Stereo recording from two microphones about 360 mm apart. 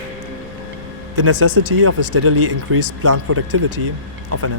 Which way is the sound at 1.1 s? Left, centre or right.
Right.